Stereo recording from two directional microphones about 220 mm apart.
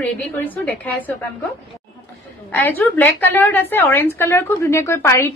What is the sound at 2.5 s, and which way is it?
A woman's voice, 10° left (ahead or behind).